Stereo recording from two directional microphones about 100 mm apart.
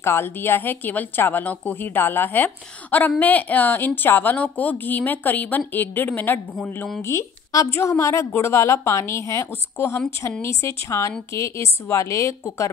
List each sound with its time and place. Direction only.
0.0 s a woman's voice: 25° left (ahead or behind)